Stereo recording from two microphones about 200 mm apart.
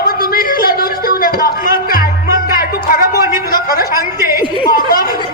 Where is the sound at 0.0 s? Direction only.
45° left (ahead or behind).